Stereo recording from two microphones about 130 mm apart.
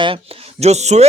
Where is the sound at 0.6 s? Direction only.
55° right (ahead or behind).